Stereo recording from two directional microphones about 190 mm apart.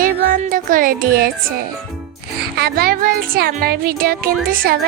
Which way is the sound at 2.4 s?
55° right (ahead or behind).